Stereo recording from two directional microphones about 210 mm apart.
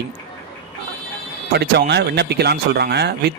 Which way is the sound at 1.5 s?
50° right (ahead or behind).